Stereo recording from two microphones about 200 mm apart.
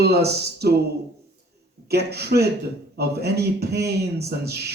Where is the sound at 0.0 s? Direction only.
55° right (ahead or behind).